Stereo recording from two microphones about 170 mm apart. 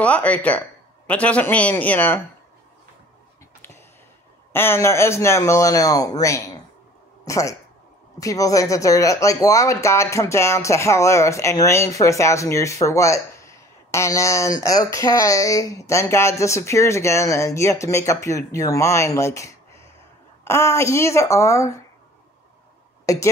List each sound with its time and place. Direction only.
0.0 s speech: 10° left (ahead or behind)
4.5 s speech: 15° left (ahead or behind)
23.1 s speech: 20° left (ahead or behind)